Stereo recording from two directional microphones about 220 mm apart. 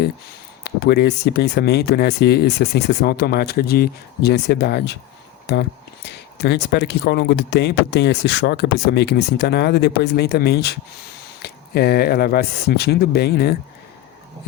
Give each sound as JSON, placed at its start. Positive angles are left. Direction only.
{"t": 0.6, "sound": "speech", "side_deg": 45}